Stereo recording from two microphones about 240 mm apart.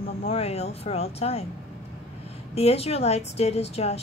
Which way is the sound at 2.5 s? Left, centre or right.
Left.